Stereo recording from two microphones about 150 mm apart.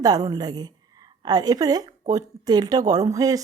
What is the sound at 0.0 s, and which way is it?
A woman's voice, 25° right (ahead or behind).